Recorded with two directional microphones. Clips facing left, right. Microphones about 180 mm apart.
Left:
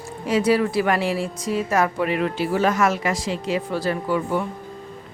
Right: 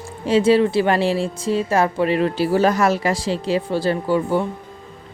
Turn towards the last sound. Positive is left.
turn(degrees=-30)  # may be behind; listen again after turning